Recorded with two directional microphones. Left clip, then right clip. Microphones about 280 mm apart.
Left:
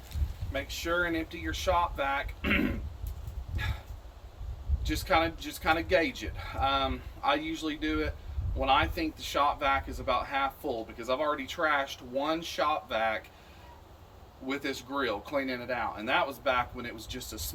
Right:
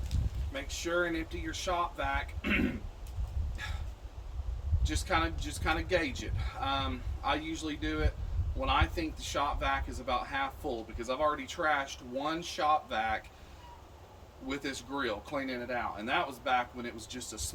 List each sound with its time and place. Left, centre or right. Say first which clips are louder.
0.5 s speech: left 2 dB; centre
3.6 s dog: left 4 dB; centre
4.8 s speech: left 4 dB; centre
14.4 s speech: left 3 dB; centre